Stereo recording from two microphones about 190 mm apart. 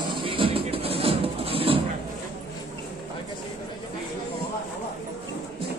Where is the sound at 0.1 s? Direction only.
25° right (ahead or behind).